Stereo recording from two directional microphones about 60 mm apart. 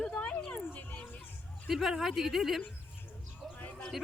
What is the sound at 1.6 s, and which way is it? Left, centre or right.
Speech, centre.